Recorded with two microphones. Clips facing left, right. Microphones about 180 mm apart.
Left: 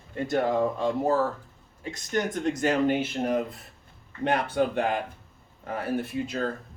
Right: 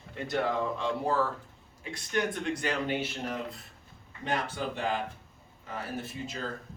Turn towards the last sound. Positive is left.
turn(degrees=60)  # may be behind; listen again after turning